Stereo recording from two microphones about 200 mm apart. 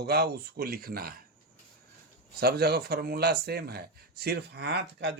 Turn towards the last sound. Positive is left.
turn(degrees=-55)  # may be behind; listen again after turning